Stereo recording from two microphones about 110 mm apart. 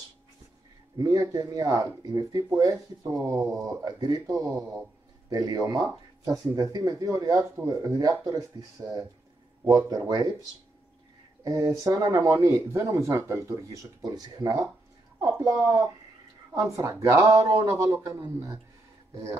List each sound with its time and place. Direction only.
0.9 s speech: 30° right (ahead or behind)
11.4 s speech: 35° right (ahead or behind)